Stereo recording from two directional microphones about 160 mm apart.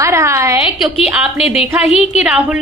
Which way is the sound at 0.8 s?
5° right (ahead or behind).